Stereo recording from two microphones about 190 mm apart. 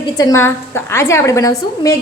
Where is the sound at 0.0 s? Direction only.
20° left (ahead or behind).